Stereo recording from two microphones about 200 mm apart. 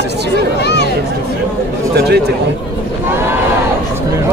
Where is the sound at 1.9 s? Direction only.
55° right (ahead or behind).